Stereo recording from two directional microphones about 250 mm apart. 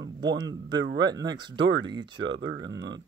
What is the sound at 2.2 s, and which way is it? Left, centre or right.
Speech, right.